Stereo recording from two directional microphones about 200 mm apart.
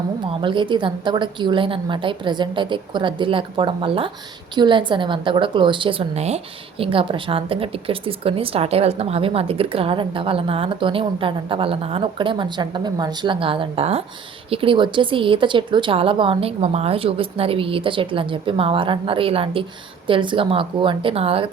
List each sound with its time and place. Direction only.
0.3 s a woman's voice: 25° right (ahead or behind)